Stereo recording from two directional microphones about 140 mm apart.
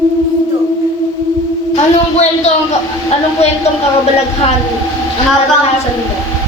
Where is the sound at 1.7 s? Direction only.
50° left (ahead or behind).